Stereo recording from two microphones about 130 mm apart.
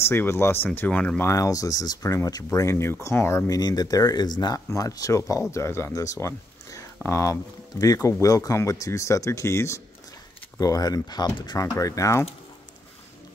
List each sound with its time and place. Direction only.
0.0 s speech: 20° left (ahead or behind)
1.3 s speech: 25° left (ahead or behind)